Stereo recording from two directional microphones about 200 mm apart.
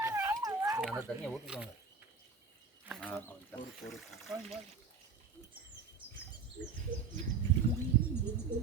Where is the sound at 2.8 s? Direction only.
5° right (ahead or behind).